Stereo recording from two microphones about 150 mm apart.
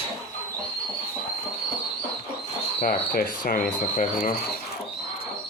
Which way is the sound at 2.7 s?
70° left (ahead or behind).